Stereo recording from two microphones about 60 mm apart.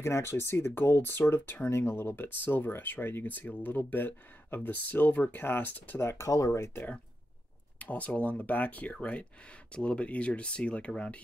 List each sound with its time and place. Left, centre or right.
0.0 s speech: left
5.9 s speech: left
6.2 s speech: left
7.8 s speech: left